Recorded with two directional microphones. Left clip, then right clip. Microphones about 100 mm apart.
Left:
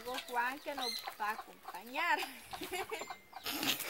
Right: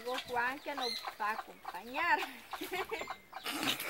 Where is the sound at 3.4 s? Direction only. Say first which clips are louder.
Right 1 dB; 55° left (ahead or behind).